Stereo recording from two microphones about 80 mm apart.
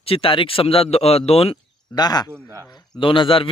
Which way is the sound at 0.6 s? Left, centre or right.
Left.